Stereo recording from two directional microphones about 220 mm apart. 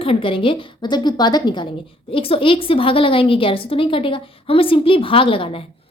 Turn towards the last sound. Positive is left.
turn(degrees=25)  # may be behind; listen again after turning